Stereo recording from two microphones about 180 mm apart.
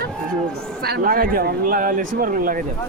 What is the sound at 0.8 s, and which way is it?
A man's voice, 55° right (ahead or behind).